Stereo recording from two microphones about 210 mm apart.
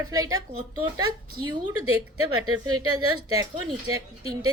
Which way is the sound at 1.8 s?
90° right.